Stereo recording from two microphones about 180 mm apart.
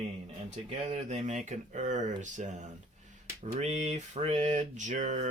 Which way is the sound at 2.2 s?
45° right (ahead or behind).